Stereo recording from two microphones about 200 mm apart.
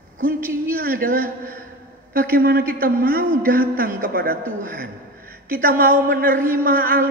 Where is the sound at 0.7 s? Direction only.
45° right (ahead or behind).